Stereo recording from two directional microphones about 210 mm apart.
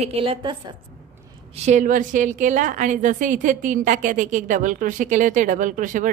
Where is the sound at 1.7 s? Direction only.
35° right (ahead or behind).